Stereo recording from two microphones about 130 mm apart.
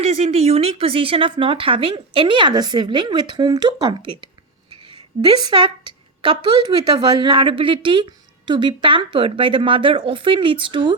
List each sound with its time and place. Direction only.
0.0 s speech: 55° right (ahead or behind); by 3.9 s 30° right (ahead or behind)
4.7 s a sound: 40° right (ahead or behind)
6.4 s speech: 35° right (ahead or behind)